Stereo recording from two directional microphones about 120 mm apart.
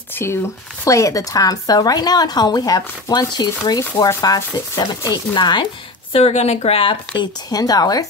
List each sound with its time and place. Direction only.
0.1 s a sound: 20° left (ahead or behind)
0.8 s a woman's voice: 25° left (ahead or behind)
6.1 s speech: 60° left (ahead or behind)
7.2 s a woman's voice: 30° left (ahead or behind)